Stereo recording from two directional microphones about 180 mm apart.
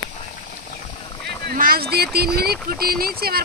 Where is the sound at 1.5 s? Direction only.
55° right (ahead or behind).